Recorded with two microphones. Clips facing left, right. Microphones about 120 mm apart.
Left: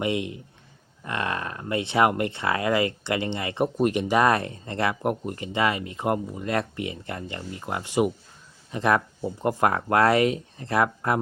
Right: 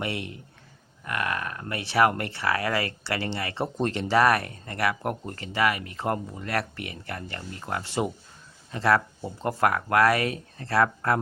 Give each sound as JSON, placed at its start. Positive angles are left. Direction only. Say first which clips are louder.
{"t": 0.0, "sound": "speech", "louder": "left 5 dB", "side_deg": 20}